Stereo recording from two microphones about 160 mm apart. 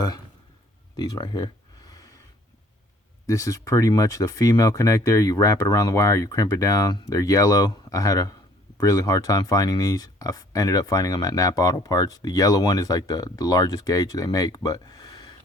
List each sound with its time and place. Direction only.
0.9 s speech: 20° left (ahead or behind)
1.9 s snort: 25° left (ahead or behind)
3.2 s speech: 20° left (ahead or behind)